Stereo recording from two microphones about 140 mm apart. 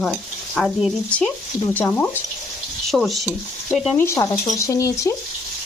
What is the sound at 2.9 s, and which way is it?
Speech, centre (ahead or behind).